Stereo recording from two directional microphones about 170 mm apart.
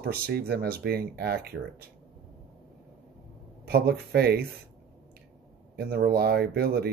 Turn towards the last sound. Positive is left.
turn(degrees=-65)  # may be behind; listen again after turning